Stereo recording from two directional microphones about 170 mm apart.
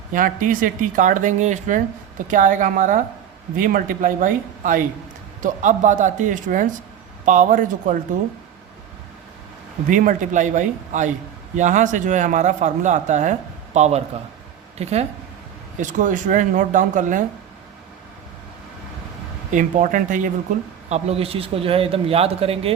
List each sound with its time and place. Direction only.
0.1 s speech: 50° right (ahead or behind)
9.9 s a man's voice: 50° right (ahead or behind)
19.5 s speech: 50° right (ahead or behind)
20.9 s a man's voice: 35° right (ahead or behind)